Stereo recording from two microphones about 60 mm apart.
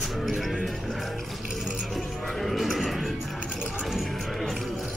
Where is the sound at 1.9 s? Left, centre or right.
Centre.